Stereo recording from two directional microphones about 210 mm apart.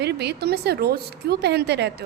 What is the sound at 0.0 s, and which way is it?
A woman's voice, 50° right (ahead or behind).